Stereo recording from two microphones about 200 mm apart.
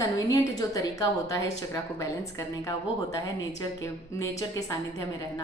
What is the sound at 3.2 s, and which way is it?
A woman's voice, 15° left (ahead or behind).